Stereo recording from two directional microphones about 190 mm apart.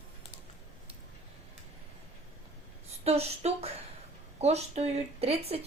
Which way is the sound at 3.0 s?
35° right (ahead or behind).